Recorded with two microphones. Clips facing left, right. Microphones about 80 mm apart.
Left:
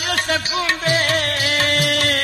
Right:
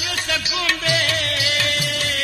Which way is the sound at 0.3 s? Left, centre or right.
Left.